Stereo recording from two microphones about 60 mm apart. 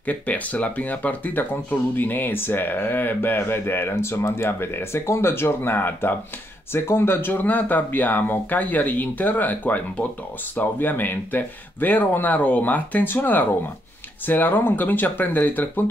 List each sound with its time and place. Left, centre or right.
0.0 s speech: left